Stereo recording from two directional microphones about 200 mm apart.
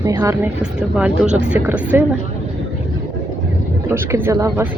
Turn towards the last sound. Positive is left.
turn(degrees=-10)  # may be behind; listen again after turning